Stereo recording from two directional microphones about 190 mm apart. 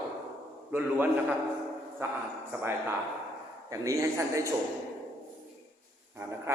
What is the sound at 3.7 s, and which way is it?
Speech, 15° right (ahead or behind).